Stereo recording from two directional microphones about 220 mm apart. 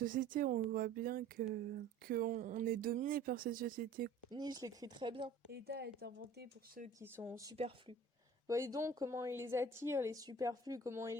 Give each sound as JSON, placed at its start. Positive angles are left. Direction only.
{"t": 0.0, "sound": "speech", "side_deg": -40}
{"t": 4.3, "sound": "speech", "side_deg": -20}
{"t": 5.5, "sound": "speech", "side_deg": -45}
{"t": 7.0, "sound": "a woman's voice", "side_deg": -10}
{"t": 7.5, "sound": "speech", "side_deg": -25}
{"t": 8.4, "sound": "a woman's voice", "side_deg": -15}